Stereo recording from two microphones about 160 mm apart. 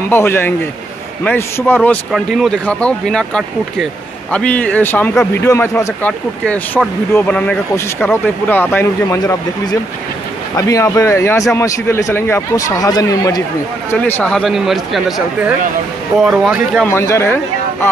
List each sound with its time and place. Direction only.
0.1 s speech: 15° left (ahead or behind)
9.2 s speech: 25° left (ahead or behind)
13.8 s speech: 15° left (ahead or behind)
16.8 s speech: 15° left (ahead or behind)